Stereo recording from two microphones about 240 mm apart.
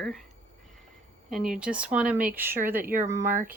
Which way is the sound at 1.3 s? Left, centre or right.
Centre.